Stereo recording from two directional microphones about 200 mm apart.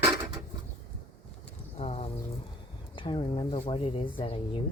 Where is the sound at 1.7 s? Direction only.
30° left (ahead or behind).